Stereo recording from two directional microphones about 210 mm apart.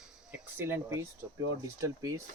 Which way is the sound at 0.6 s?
10° right (ahead or behind).